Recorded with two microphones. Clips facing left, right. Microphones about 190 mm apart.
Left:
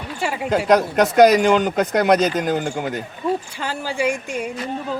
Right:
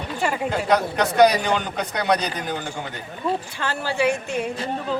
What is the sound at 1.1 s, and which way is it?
Speech, 45° left (ahead or behind).